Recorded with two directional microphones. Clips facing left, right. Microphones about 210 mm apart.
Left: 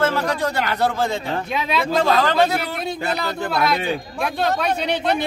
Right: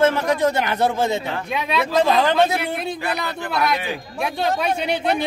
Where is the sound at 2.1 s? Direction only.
15° right (ahead or behind).